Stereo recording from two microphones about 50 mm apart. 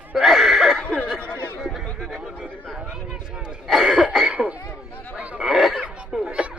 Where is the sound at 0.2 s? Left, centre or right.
Centre.